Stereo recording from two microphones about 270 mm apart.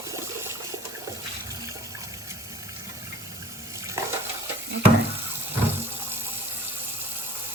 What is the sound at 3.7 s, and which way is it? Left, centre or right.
Frying, centre.